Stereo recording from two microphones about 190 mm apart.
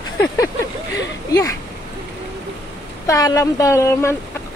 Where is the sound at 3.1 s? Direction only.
15° left (ahead or behind).